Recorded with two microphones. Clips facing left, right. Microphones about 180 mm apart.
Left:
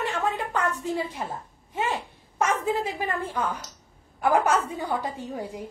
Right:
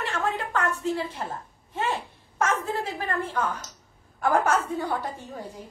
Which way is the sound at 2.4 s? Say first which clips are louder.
Left 2 dB; 15° left (ahead or behind).